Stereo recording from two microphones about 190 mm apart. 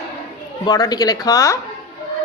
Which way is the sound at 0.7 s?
20° left (ahead or behind).